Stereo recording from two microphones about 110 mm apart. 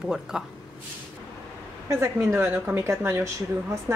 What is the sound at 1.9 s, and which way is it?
A woman's voice, 25° right (ahead or behind).